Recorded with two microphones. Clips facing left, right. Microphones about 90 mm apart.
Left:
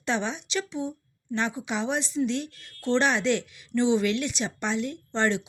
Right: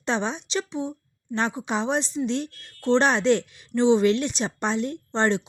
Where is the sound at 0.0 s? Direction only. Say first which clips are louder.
Right 2 dB; 30° right (ahead or behind).